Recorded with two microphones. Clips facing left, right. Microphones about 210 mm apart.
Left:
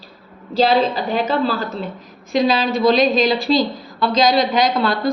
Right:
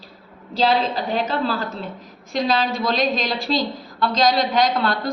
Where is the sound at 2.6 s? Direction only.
85° left.